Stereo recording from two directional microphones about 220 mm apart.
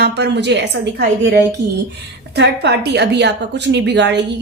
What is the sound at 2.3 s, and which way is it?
A woman's voice, 50° right (ahead or behind).